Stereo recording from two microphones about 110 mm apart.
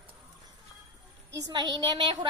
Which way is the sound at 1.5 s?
40° right (ahead or behind).